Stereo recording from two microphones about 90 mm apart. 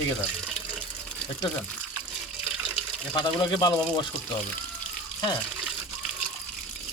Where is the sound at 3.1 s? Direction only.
60° left (ahead or behind).